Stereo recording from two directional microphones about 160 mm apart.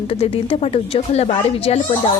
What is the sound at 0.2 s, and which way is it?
A woman's voice, 40° left (ahead or behind).